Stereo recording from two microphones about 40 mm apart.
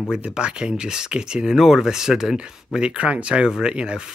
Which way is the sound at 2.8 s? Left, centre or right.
Right.